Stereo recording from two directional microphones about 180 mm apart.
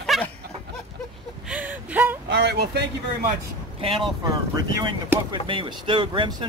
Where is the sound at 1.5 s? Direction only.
10° right (ahead or behind).